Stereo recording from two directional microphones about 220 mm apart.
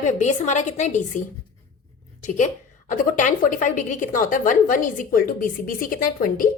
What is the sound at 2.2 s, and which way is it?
A woman's voice, 35° left (ahead or behind).